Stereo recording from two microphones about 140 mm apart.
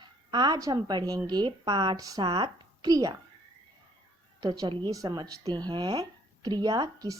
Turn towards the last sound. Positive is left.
turn(degrees=-25)  # may be behind; listen again after turning